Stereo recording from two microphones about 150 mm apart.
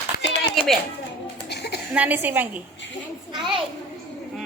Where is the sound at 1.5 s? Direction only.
90° left.